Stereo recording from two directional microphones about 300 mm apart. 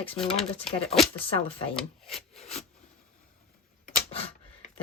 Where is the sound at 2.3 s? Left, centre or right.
Left.